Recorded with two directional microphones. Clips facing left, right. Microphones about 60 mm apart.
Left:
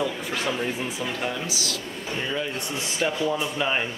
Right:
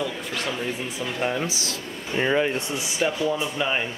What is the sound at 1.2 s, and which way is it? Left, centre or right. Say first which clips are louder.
Speech: right 3 dB; right.